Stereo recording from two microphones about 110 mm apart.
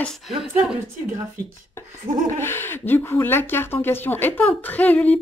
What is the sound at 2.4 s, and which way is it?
Speech, 20° left (ahead or behind).